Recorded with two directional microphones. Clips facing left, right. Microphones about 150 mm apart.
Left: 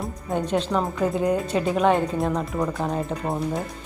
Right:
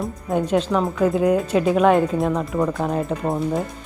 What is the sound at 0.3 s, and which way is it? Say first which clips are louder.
Speech: right 4 dB; 10° right (ahead or behind).